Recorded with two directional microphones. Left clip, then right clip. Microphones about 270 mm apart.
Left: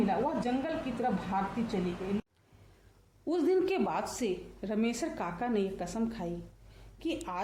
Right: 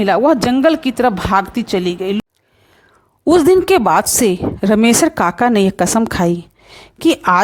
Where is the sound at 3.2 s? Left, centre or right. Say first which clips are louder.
Right 19 dB; right.